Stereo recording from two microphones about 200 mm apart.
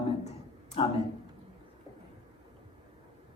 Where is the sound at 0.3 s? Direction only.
30° left (ahead or behind).